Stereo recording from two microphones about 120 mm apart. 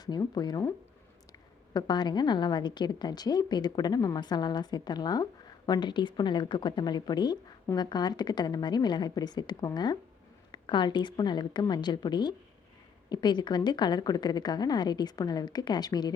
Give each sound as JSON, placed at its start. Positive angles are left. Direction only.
{"t": 0.0, "sound": "a woman's voice", "side_deg": 35}